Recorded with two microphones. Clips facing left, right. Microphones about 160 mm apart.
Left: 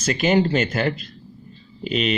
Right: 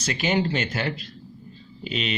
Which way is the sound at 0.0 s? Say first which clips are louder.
Left 5 dB; 50° left (ahead or behind).